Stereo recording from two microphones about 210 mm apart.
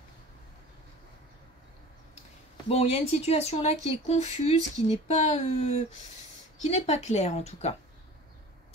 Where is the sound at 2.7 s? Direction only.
30° left (ahead or behind).